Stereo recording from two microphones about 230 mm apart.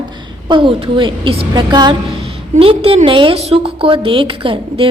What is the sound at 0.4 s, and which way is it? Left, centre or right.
A woman's voice, right.